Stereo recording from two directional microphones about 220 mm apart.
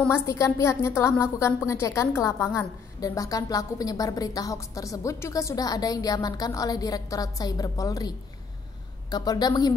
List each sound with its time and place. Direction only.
0.1 s a woman's voice: 15° left (ahead or behind)
9.1 s a woman's voice: 20° left (ahead or behind)